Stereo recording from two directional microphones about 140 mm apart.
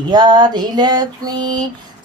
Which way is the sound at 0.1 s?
30° right (ahead or behind).